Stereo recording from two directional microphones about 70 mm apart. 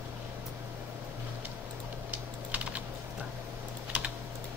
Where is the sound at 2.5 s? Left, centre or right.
Centre.